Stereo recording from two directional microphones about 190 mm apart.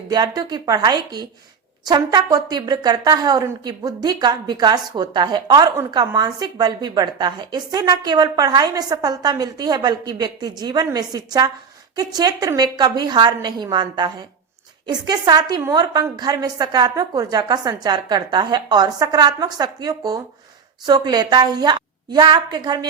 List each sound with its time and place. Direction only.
0.1 s a woman's voice: 20° right (ahead or behind)